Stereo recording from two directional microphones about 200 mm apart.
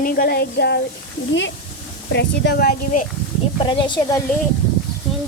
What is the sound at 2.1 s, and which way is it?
Speech, 55° left (ahead or behind).